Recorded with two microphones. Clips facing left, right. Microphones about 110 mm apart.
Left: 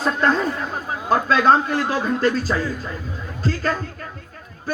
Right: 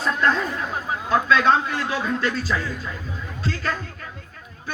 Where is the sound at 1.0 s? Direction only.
45° left (ahead or behind).